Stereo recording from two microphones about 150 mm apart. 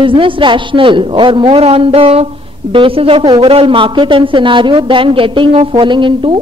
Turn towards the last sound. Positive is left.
turn(degrees=-35)  # may be behind; listen again after turning